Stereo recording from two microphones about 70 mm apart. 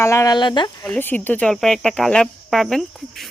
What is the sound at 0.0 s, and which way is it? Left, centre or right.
Speech, left.